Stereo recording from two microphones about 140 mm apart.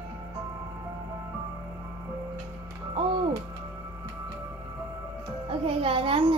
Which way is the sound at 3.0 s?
40° right (ahead or behind).